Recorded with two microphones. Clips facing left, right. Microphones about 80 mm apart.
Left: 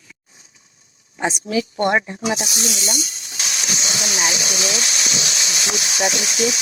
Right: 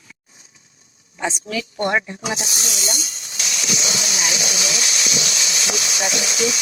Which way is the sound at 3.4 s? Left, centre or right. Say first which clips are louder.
Right 1 dB; left.